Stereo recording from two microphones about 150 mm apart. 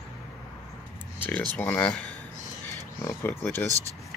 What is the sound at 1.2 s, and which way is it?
A child's voice, 10° left (ahead or behind).